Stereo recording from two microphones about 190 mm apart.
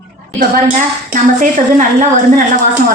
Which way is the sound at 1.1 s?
45° right (ahead or behind).